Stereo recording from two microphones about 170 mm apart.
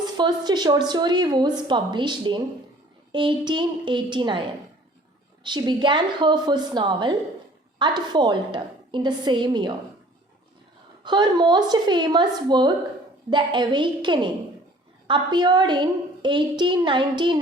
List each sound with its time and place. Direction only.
0.0 s a woman's voice: 25° right (ahead or behind)
11.0 s a woman's voice: 25° right (ahead or behind)